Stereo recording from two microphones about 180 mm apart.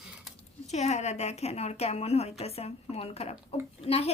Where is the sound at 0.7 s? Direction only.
40° left (ahead or behind).